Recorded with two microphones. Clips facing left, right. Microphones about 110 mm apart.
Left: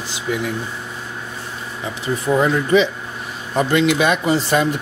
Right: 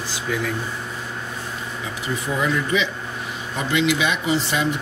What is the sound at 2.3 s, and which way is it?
Speech, 40° left (ahead or behind).